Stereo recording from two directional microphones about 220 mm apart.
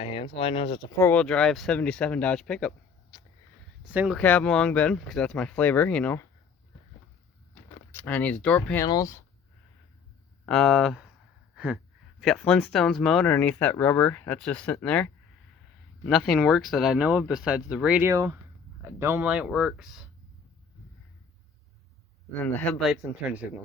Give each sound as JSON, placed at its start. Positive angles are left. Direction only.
{"t": 0.0, "sound": "speech", "side_deg": 25}
{"t": 0.9, "sound": "speech", "side_deg": 10}
{"t": 3.1, "sound": "sniff", "side_deg": 20}
{"t": 3.8, "sound": "speech", "side_deg": -5}
{"t": 4.2, "sound": "speech", "side_deg": 5}
{"t": 7.5, "sound": "speech", "side_deg": 10}
{"t": 10.4, "sound": "speech", "side_deg": 0}
{"t": 11.5, "sound": "gasp", "side_deg": -5}
{"t": 12.2, "sound": "speech", "side_deg": 0}
{"t": 22.3, "sound": "speech", "side_deg": 10}